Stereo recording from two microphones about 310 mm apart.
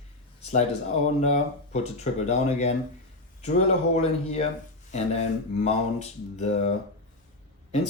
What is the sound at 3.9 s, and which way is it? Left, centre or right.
Speech, left.